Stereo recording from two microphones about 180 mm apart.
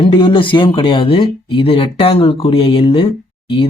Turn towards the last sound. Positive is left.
turn(degrees=30)  # may be behind; listen again after turning